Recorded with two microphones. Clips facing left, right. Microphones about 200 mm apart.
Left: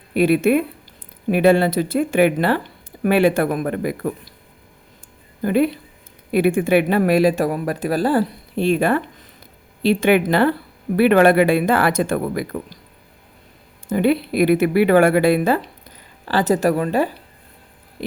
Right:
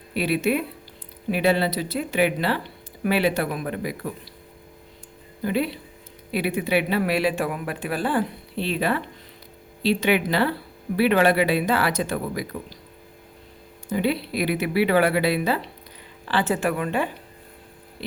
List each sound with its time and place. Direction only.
0.1 s speech: 50° left (ahead or behind)
5.4 s speech: 50° left (ahead or behind)
13.8 s a woman's voice: 50° left (ahead or behind)